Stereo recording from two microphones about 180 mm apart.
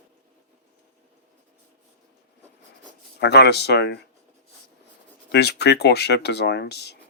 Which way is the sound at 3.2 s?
70° left (ahead or behind).